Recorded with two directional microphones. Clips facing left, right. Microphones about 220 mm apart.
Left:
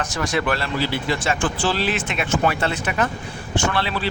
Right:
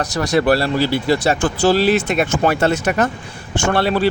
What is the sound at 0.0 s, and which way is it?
Speech, 40° right (ahead or behind).